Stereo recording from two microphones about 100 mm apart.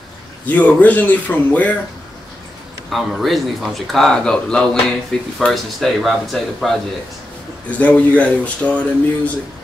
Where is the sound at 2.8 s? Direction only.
Centre (ahead or behind).